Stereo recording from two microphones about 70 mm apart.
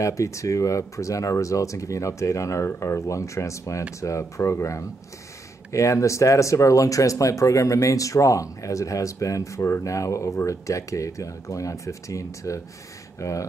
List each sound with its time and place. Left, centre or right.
0.0 s speech: left